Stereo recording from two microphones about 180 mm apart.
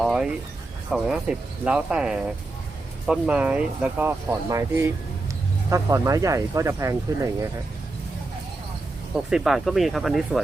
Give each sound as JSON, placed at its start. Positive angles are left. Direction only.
{"t": 0.0, "sound": "music", "side_deg": 0}
{"t": 0.9, "sound": "speech", "side_deg": 0}
{"t": 9.3, "sound": "speech", "side_deg": 0}